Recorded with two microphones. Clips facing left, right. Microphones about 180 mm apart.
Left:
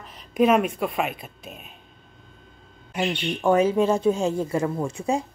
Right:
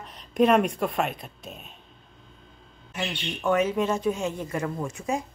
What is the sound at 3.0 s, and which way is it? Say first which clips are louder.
Speech: left 6 dB; 30° left (ahead or behind).